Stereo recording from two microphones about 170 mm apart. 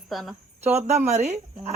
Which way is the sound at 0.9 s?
40° right (ahead or behind).